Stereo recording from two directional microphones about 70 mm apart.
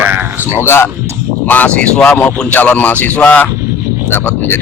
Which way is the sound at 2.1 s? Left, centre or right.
Left.